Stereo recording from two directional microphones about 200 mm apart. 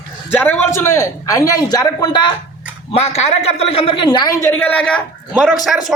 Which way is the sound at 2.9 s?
30° left (ahead or behind).